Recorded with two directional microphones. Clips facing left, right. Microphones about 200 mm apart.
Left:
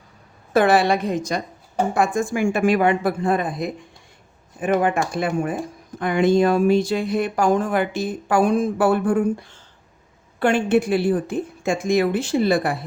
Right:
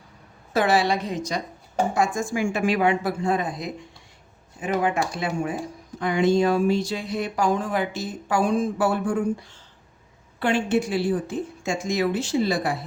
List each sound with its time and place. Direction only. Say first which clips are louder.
0.5 s speech: left 4 dB; 55° left (ahead or behind)